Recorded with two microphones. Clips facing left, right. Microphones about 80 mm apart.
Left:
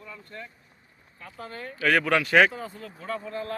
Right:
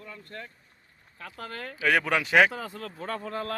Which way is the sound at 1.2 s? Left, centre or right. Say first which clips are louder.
Even; right.